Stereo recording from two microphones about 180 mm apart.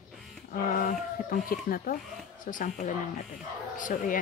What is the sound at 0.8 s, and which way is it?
Speech, 50° left (ahead or behind).